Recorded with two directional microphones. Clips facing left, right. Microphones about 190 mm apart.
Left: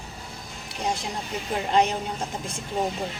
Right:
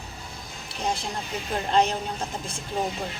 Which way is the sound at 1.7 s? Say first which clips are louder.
Even; 15° left (ahead or behind).